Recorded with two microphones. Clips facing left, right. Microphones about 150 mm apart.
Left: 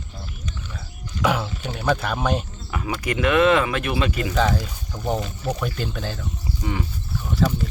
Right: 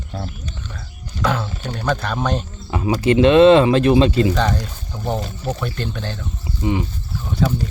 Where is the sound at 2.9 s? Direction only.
30° right (ahead or behind).